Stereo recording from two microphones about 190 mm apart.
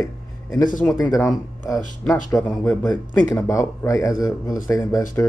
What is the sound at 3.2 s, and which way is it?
Speech, 15° left (ahead or behind).